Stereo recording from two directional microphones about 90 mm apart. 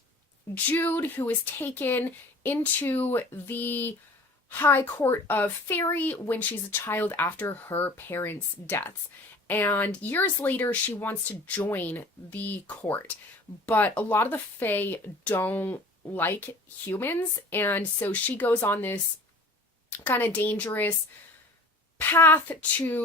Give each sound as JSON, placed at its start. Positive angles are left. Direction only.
{"t": 0.5, "sound": "speech", "side_deg": 20}
{"t": 22.0, "sound": "speech", "side_deg": 25}